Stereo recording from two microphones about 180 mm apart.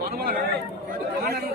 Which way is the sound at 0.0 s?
60° right (ahead or behind).